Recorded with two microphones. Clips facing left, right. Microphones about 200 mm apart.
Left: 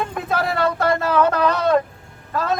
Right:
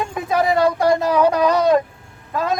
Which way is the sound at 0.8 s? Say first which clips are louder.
Right 2 dB; 15° right (ahead or behind).